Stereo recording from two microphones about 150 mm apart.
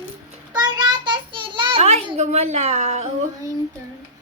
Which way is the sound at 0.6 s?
30° right (ahead or behind).